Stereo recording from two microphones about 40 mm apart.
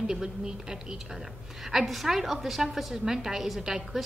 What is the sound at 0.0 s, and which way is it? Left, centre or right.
A woman's voice, centre.